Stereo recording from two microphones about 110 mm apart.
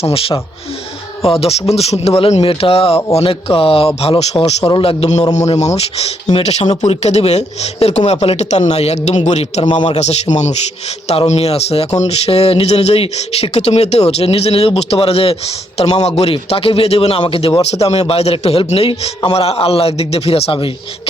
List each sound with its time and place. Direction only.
0.0 s speech: 60° left (ahead or behind)
4.7 s speech: 55° left (ahead or behind); by 5.2 s 75° left (ahead or behind)
5.3 s a man's voice: 90° left
9.6 s a man's voice: 45° left (ahead or behind)
10.0 s a man's voice: 90° left
11.3 s speech: 70° left (ahead or behind); by 17.5 s 55° left (ahead or behind)
17.6 s speech: 70° left (ahead or behind); by 20.7 s 50° left (ahead or behind)